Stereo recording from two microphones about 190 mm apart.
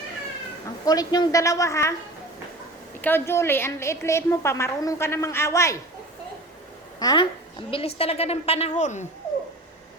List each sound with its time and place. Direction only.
0.9 s a woman's voice: 20° left (ahead or behind)
3.0 s a woman's voice: 10° left (ahead or behind)
7.0 s a woman's voice: 20° left (ahead or behind)
7.7 s a woman's voice: 30° left (ahead or behind)